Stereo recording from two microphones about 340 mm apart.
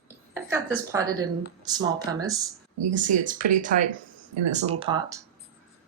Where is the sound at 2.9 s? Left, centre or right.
Right.